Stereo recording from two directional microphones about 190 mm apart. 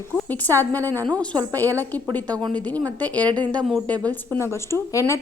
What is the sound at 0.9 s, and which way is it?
Speech, 20° right (ahead or behind).